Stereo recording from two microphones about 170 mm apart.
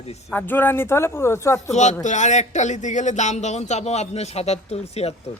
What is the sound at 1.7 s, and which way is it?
Speech, 45° left (ahead or behind).